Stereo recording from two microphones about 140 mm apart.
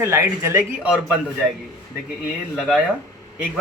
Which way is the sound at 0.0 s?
20° right (ahead or behind).